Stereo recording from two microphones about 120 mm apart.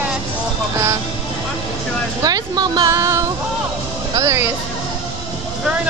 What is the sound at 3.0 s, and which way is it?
Music, 25° right (ahead or behind).